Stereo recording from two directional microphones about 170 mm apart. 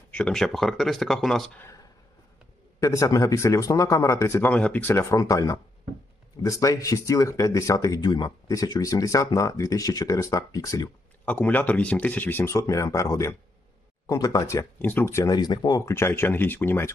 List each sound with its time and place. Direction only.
0.1 s speech: 5° left (ahead or behind)
1.5 s a sound: 15° left (ahead or behind)
2.8 s speech: 20° left (ahead or behind)
11.3 s speech: 10° left (ahead or behind)